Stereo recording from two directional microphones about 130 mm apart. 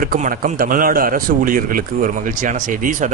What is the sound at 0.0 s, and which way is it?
A man's voice, 90° right.